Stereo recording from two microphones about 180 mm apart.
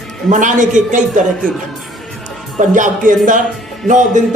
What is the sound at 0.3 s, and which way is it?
Speech, 45° right (ahead or behind).